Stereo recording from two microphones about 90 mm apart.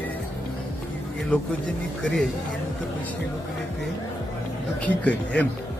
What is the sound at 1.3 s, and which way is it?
Speech, 15° left (ahead or behind).